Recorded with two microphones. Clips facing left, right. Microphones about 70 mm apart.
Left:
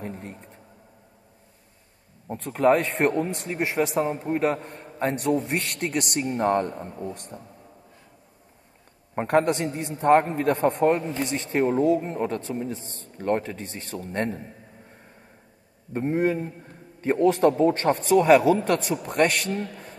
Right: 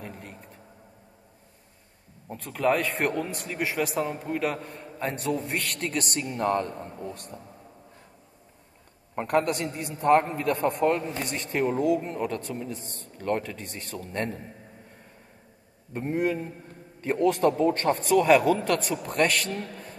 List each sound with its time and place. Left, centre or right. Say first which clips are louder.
0.0 s a sound: left 5 dB; left
2.3 s a man's voice: left 5 dB; left
4.8 s a sound: left 5 dB; left
5.5 s a man's voice: left 3 dB; left
5.8 s a man's voice: left 3 dB; left
9.4 s speech: left 4 dB; left
9.9 s a man's voice: left 2 dB; left
10.5 s a man's voice: left 3 dB; left
10.8 s a man's voice: left 3 dB; left
15.9 s a man's voice: left 3 dB; left
18.8 s speech: left 2 dB; right
19.0 s a man's voice: left 2 dB; left